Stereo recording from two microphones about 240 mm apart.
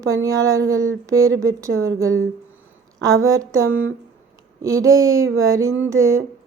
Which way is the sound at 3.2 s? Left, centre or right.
Centre.